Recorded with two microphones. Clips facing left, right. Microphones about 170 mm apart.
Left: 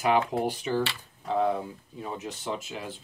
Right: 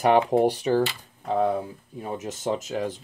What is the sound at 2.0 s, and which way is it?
Speech, 45° right (ahead or behind).